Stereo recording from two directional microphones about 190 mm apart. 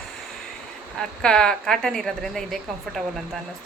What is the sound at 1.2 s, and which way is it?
A woman's voice, 5° left (ahead or behind).